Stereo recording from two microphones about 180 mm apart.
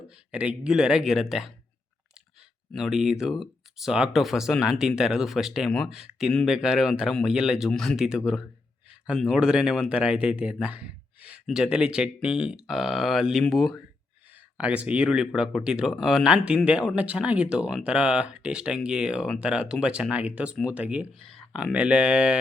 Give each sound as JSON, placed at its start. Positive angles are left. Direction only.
{"t": 0.3, "sound": "speech", "side_deg": -5}
{"t": 2.7, "sound": "speech", "side_deg": 0}